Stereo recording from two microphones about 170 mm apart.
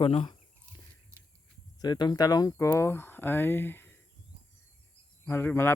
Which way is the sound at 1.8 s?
25° left (ahead or behind).